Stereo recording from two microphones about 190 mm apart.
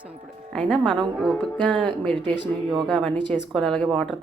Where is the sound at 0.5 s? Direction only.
Centre (ahead or behind).